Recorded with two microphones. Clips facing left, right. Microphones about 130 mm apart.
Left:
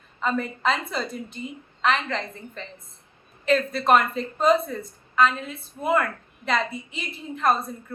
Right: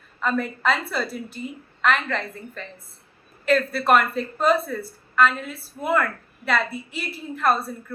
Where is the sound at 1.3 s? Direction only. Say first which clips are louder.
Right 2 dB; 5° right (ahead or behind).